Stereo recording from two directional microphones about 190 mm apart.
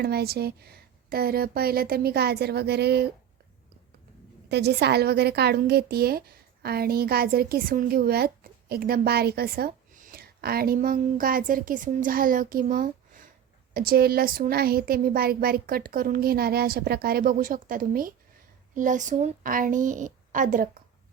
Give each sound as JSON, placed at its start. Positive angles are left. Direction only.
{"t": 0.0, "sound": "a woman's voice", "side_deg": -55}
{"t": 4.4, "sound": "a woman's voice", "side_deg": -60}